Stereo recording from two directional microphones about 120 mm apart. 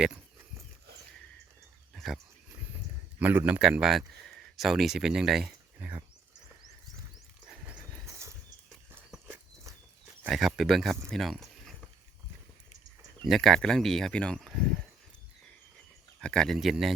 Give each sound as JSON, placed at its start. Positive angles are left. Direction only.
{"t": 1.9, "sound": "dog", "side_deg": 0}
{"t": 3.2, "sound": "speech", "side_deg": -15}
{"t": 7.5, "sound": "horse", "side_deg": -10}
{"t": 8.0, "sound": "horse", "side_deg": -25}
{"t": 10.2, "sound": "speech", "side_deg": 0}
{"t": 13.2, "sound": "speech", "side_deg": 0}
{"t": 14.4, "sound": "a sound", "side_deg": 5}
{"t": 16.2, "sound": "speech", "side_deg": 5}